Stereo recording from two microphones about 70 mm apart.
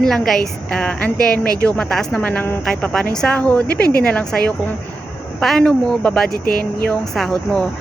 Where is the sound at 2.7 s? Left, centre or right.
Centre.